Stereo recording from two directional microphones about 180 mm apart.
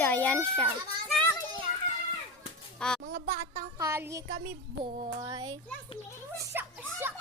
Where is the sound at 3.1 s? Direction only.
65° right (ahead or behind).